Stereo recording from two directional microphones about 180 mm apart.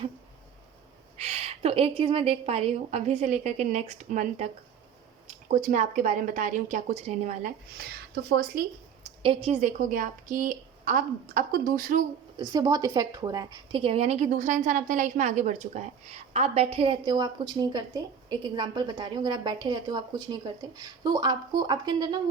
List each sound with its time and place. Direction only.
1.2 s a woman's voice: 35° right (ahead or behind)
5.5 s a woman's voice: 45° right (ahead or behind)
7.8 s speech: 60° right (ahead or behind)
9.2 s a woman's voice: 30° right (ahead or behind); by 12.0 s 50° right (ahead or behind)
12.4 s a woman's voice: 20° right (ahead or behind)